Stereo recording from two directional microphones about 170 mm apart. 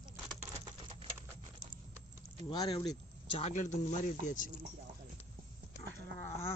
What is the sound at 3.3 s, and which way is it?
Speech, 40° left (ahead or behind).